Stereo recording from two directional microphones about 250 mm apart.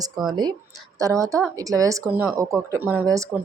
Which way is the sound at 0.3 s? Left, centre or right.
Centre.